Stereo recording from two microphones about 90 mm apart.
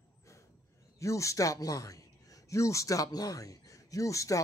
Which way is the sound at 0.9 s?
35° left (ahead or behind).